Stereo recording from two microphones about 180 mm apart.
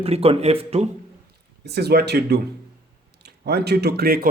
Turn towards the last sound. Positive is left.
turn(degrees=-60)  # may be behind; listen again after turning